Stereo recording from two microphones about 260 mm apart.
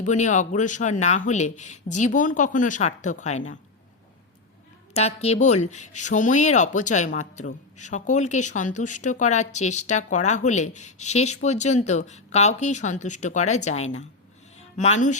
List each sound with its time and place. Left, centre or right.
0.0 s speech: left
4.9 s speech: left